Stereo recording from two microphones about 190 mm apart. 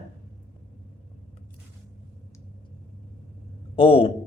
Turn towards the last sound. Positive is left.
turn(degrees=30)  # may be behind; listen again after turning